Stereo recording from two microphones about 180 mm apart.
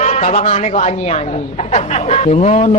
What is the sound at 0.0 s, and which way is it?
A man's voice, 40° left (ahead or behind).